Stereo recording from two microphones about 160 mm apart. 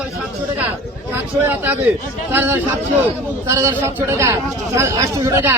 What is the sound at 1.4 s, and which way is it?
A man's voice, 10° right (ahead or behind).